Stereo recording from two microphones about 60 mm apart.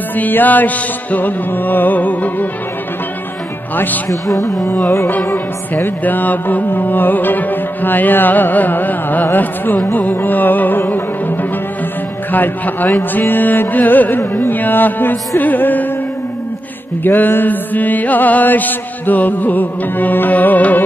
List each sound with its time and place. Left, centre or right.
0.1 s music: left
3.7 s music: left
4.1 s music: left
5.2 s music: left
12.3 s music: left
17.0 s mantra: left